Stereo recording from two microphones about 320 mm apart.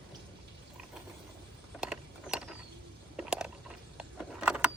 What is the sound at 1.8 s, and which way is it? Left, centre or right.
Mechanisms, centre.